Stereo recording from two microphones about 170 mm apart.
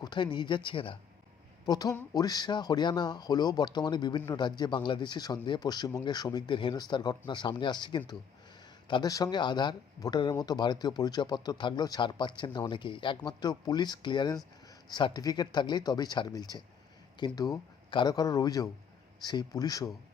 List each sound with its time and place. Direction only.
0.0 s speech: 25° left (ahead or behind)